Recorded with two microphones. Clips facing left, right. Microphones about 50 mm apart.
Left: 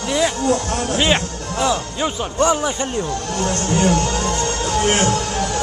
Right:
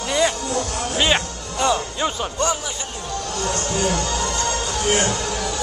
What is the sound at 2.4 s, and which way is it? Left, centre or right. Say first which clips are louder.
Speech: left 7 dB; left.